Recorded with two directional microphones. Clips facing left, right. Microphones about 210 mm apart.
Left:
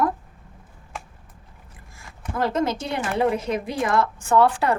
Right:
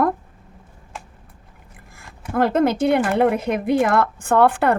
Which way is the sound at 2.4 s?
55° right (ahead or behind).